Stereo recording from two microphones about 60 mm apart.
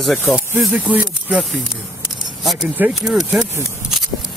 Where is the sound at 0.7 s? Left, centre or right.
Right.